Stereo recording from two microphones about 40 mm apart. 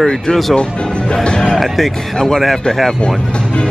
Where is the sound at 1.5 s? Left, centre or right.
Centre.